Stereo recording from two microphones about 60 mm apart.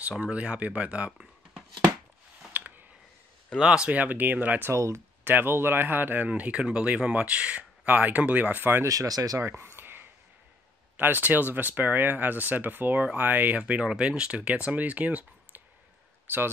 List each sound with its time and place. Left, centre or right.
0.2 s speech: right
2.5 s a sound: right
3.5 s speech: centre
3.9 s speech: right
4.6 s speech: right
5.2 s speech: right
8.8 s speech: right
9.4 s a sound: right
11.0 s speech: right
13.6 s speech: right